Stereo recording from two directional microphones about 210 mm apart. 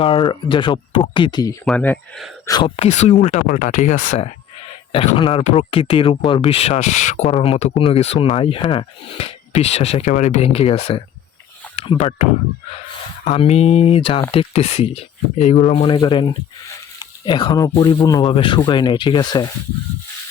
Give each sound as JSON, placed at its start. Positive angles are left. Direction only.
{"t": 0.0, "sound": "speech", "side_deg": 20}
{"t": 1.6, "sound": "speech", "side_deg": 5}
{"t": 2.5, "sound": "speech", "side_deg": 25}